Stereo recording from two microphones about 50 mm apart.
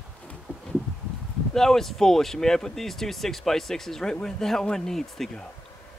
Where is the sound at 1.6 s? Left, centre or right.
Centre.